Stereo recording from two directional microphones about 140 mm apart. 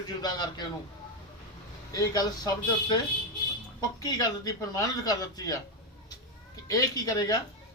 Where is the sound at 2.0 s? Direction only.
30° left (ahead or behind).